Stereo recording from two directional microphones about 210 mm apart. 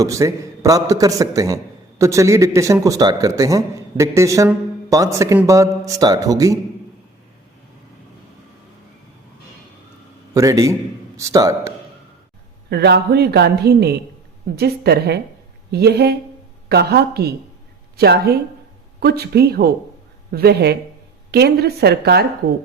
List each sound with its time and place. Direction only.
0.0 s a man's voice: 15° right (ahead or behind)
10.3 s a man's voice: 15° right (ahead or behind)
12.7 s a man's voice: 50° right (ahead or behind)